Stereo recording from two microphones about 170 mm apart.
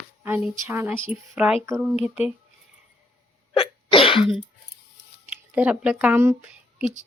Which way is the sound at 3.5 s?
30° left (ahead or behind).